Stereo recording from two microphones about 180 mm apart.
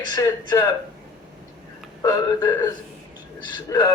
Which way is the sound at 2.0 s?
20° left (ahead or behind).